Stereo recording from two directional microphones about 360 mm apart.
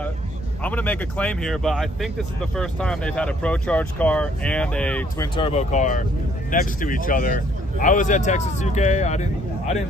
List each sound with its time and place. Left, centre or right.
0.7 s a man's voice: centre